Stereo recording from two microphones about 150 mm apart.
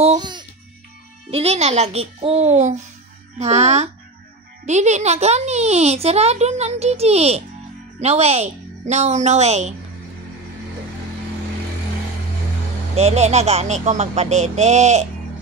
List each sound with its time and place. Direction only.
0.2 s music: 30° right (ahead or behind)
1.3 s speech: 45° right (ahead or behind)
12.9 s speech: 45° right (ahead or behind)